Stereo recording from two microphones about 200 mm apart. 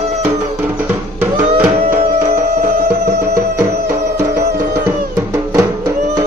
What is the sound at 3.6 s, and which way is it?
Music, 15° right (ahead or behind).